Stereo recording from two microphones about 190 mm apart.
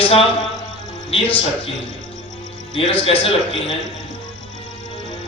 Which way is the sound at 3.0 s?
30° left (ahead or behind).